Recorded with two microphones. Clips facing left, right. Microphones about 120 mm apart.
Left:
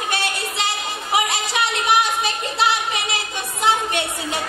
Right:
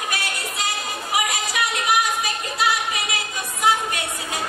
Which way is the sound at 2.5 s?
25° left (ahead or behind).